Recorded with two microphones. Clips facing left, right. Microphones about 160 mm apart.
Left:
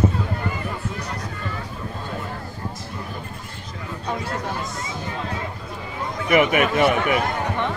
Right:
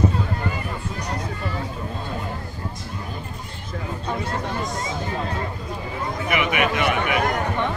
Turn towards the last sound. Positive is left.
turn(degrees=40)  # may be behind; listen again after turning